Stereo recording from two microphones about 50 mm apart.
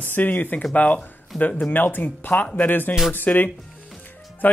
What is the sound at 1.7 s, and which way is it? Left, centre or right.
Speech, left.